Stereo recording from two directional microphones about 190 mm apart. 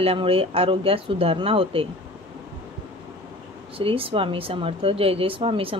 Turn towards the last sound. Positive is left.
turn(degrees=-30)  # may be behind; listen again after turning